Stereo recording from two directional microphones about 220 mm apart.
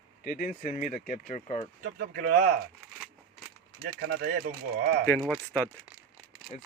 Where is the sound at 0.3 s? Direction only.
35° left (ahead or behind).